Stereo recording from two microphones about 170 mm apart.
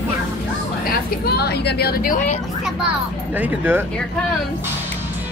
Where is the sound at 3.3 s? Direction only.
10° right (ahead or behind).